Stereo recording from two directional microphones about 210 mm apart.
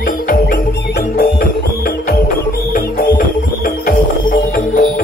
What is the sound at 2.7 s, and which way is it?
Music, 45° left (ahead or behind).